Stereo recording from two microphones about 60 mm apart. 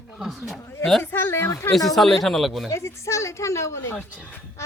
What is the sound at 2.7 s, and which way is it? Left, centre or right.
Speech, left.